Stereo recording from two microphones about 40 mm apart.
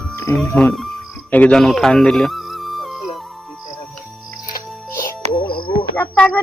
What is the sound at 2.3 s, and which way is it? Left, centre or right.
Music, centre.